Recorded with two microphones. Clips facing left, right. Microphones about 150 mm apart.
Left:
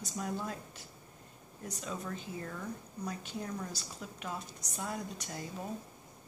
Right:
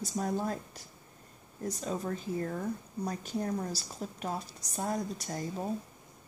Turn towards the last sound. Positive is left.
turn(degrees=-35)  # may be behind; listen again after turning